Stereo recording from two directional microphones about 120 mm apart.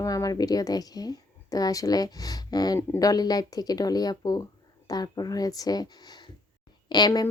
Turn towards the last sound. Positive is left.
turn(degrees=35)  # may be behind; listen again after turning